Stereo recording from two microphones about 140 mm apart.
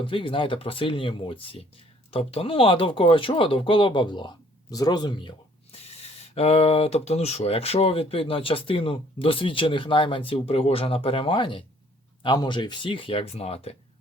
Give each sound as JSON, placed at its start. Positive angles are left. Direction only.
{"t": 0.0, "sound": "speech", "side_deg": 40}
{"t": 5.7, "sound": "speech", "side_deg": 45}